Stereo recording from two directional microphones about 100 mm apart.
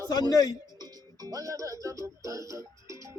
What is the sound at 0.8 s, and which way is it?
Music, 35° right (ahead or behind).